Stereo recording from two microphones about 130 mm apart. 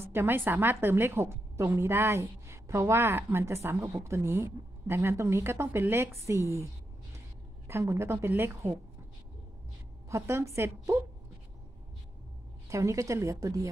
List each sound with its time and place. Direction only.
0.0 s a woman's voice: 15° right (ahead or behind)
10.0 s a woman's voice: 20° right (ahead or behind)
12.6 s a woman's voice: 25° right (ahead or behind)